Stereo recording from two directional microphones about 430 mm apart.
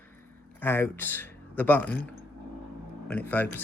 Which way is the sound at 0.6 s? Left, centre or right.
Centre.